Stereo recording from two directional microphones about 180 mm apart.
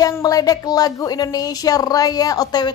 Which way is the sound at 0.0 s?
20° left (ahead or behind).